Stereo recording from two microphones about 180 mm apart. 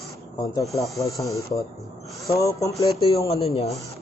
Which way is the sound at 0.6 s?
Centre (ahead or behind).